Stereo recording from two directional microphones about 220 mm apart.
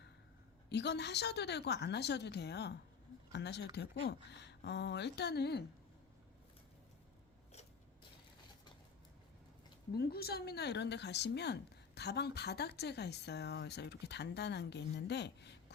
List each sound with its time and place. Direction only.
0.7 s speech: 50° left (ahead or behind)
9.9 s speech: 45° left (ahead or behind)